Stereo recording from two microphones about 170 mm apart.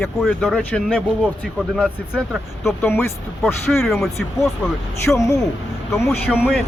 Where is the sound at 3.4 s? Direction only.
Centre (ahead or behind).